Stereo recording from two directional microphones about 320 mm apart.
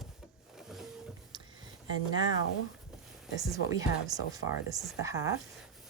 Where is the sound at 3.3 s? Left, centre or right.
Centre.